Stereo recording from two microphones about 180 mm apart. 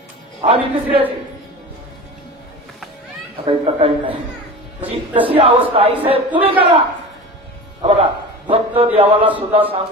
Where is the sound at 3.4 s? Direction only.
30° right (ahead or behind).